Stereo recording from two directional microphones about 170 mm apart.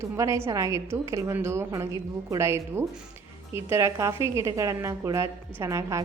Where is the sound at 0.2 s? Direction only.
15° right (ahead or behind).